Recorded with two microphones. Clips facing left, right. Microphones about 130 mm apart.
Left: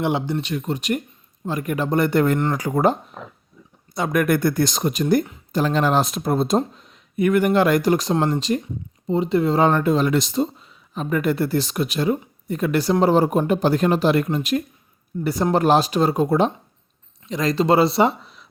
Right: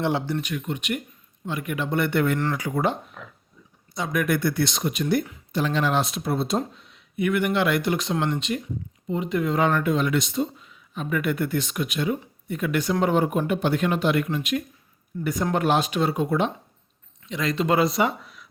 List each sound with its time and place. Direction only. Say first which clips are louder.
0.0 s speech: left 3 dB; 15° left (ahead or behind)
0.5 s speech: left 5 dB; 35° left (ahead or behind)
3.9 s speech: left 5 dB; 55° left (ahead or behind); by 18.4 s 25° left (ahead or behind)